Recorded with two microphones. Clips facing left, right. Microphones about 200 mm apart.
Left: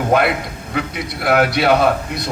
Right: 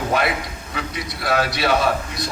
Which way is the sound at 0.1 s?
60° left (ahead or behind).